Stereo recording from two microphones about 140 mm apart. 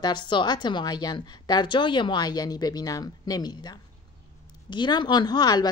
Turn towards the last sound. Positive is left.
turn(degrees=30)  # may be behind; listen again after turning